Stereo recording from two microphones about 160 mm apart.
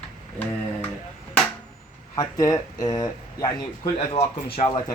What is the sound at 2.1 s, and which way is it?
Speech, 20° left (ahead or behind).